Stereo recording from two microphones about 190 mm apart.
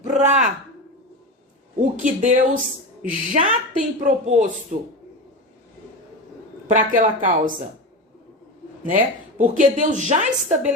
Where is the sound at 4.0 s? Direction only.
40° right (ahead or behind).